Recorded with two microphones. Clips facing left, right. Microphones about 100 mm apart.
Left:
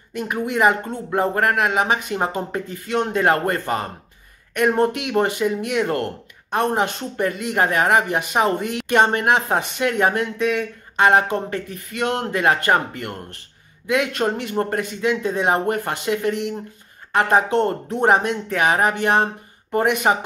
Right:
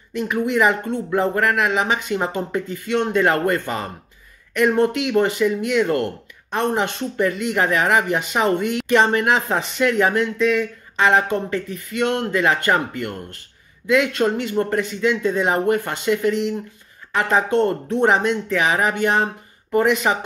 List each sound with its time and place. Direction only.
0.1 s speech: 40° left (ahead or behind)
10.1 s speech: 50° left (ahead or behind)
13.8 s speech: 50° left (ahead or behind)